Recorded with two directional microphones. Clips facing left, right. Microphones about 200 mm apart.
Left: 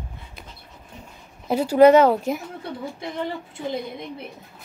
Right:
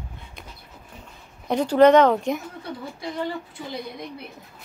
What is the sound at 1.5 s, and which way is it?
Speech, 10° left (ahead or behind).